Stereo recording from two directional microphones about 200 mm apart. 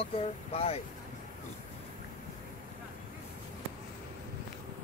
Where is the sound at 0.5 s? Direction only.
30° left (ahead or behind).